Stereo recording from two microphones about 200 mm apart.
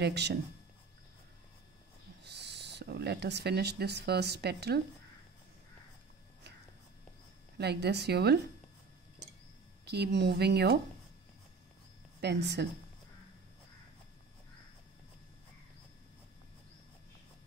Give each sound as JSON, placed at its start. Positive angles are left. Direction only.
{"t": 0.0, "sound": "speech", "side_deg": -55}
{"t": 2.2, "sound": "speech", "side_deg": -60}
{"t": 7.5, "sound": "speech", "side_deg": -55}
{"t": 9.8, "sound": "speech", "side_deg": -55}
{"t": 12.2, "sound": "speech", "side_deg": -60}